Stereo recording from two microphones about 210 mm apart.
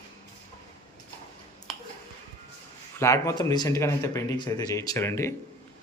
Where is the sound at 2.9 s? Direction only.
15° left (ahead or behind).